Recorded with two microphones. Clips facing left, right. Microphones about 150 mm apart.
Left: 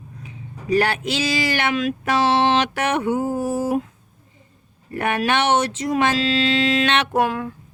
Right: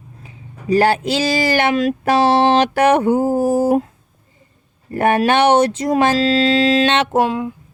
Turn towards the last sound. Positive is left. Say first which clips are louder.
# right 4 dB
turn(degrees=-20)  # may be behind; listen again after turning